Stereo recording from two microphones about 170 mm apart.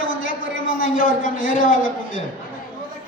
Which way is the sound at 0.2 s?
55° left (ahead or behind).